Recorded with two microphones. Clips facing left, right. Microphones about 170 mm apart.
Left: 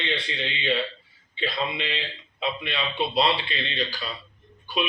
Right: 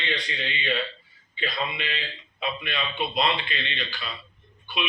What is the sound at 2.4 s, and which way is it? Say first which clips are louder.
A man's voice: left 2 dB; 30° left (ahead or behind).